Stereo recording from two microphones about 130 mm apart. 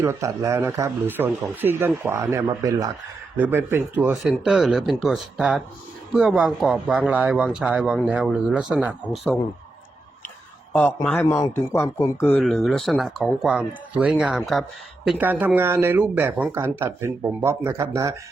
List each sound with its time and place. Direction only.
0.0 s speech: 20° right (ahead or behind)
3.3 s speech: 15° right (ahead or behind)
4.4 s speech: centre (ahead or behind)
10.7 s speech: 10° left (ahead or behind)
13.4 s speech: 10° right (ahead or behind)
15.2 s speech: 15° right (ahead or behind)